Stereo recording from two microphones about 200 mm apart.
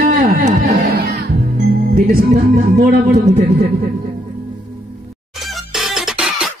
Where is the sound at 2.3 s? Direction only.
35° right (ahead or behind).